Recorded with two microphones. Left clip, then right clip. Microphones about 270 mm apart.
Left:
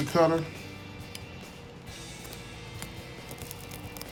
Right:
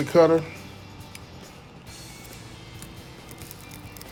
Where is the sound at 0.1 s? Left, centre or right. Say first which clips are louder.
Right 6 dB; right.